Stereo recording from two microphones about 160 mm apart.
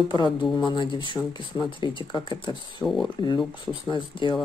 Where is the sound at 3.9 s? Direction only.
30° left (ahead or behind).